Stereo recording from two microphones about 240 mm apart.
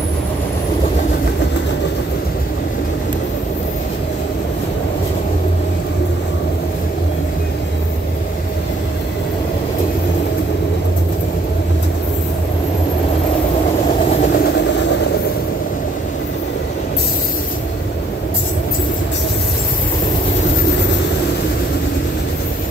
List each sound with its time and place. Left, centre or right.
14.3 s vehicle: left